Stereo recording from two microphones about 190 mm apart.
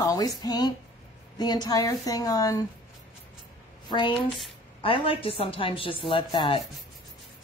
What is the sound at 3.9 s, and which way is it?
A woman's voice, 25° left (ahead or behind).